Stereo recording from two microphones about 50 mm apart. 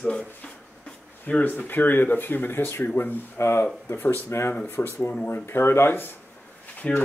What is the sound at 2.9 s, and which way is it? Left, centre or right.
Speech, left.